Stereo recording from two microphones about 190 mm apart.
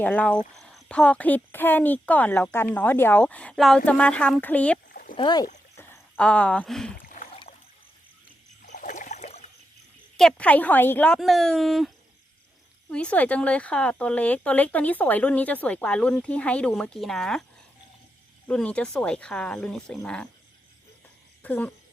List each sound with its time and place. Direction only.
0.0 s speech: 10° left (ahead or behind)
5.1 s speech: 25° left (ahead or behind)
5.7 s speech: 10° left (ahead or behind)
7.0 s boat: 40° left (ahead or behind)
8.6 s rowboat: 40° left (ahead or behind)
10.2 s speech: 5° left (ahead or behind)
12.9 s speech: 5° left (ahead or behind)
18.4 s speech: 5° left (ahead or behind)
21.4 s speech: 10° left (ahead or behind)